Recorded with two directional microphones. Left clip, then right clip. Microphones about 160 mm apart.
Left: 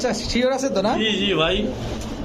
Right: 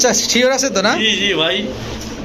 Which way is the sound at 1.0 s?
70° left (ahead or behind).